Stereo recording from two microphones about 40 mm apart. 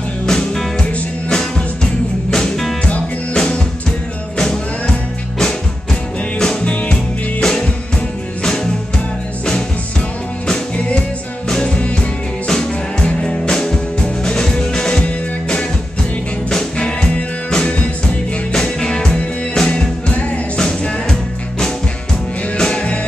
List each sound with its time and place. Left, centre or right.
0.3 s music: centre
2.3 s music: centre
3.3 s music: left
10.4 s music: left
19.7 s music: left